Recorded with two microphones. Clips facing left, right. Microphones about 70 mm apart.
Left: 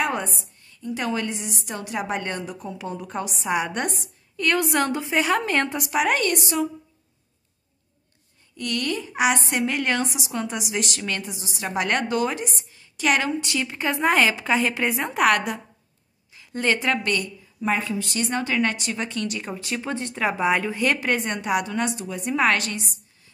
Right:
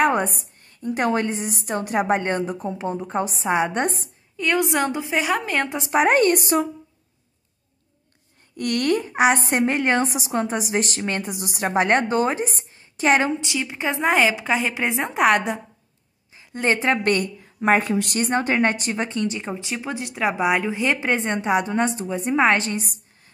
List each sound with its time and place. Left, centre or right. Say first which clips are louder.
0.0 s a sound: right 6 dB; right
0.7 s a woman's voice: right 5 dB; right
4.4 s a woman's voice: right 1 dB; centre
5.7 s a woman's voice: right 4 dB; right
8.5 s a woman's voice: right 6 dB; right
10.0 s a woman's voice: right 5 dB; right
11.2 s a woman's voice: right 6 dB; right
13.4 s a woman's voice: even; centre
16.6 s a woman's voice: right 2 dB; right
17.0 s a woman's voice: right 5 dB; right
18.3 s a woman's voice: right 4 dB; right